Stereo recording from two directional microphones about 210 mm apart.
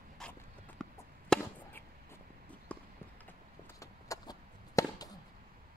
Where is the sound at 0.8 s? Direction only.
5° left (ahead or behind).